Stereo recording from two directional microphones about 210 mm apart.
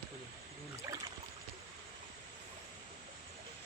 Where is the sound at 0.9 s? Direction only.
15° right (ahead or behind).